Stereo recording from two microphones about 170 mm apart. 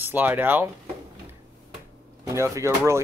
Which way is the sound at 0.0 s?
10° right (ahead or behind).